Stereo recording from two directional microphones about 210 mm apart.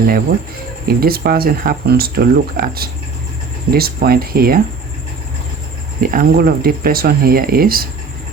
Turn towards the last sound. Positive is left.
turn(degrees=-45)  # may be behind; listen again after turning